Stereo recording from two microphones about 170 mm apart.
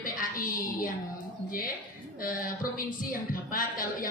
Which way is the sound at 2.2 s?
55° left (ahead or behind).